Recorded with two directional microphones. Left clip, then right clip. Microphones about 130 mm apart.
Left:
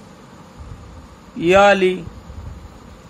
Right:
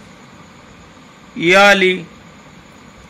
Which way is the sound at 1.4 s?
15° right (ahead or behind).